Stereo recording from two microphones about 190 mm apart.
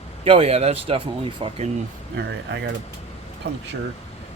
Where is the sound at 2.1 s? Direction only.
70° right (ahead or behind).